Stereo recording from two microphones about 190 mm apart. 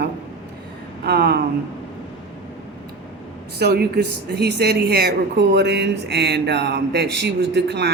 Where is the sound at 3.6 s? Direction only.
55° right (ahead or behind).